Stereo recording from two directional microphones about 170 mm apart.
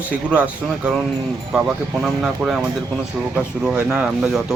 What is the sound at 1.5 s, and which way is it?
Speech, centre (ahead or behind).